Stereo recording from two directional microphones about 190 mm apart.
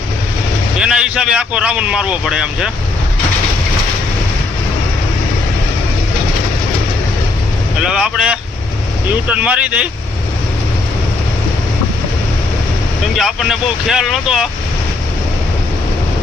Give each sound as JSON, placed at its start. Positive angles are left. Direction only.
{"t": 0.8, "sound": "a man's voice", "side_deg": -5}
{"t": 7.9, "sound": "a man's voice", "side_deg": -5}
{"t": 13.1, "sound": "a man's voice", "side_deg": 0}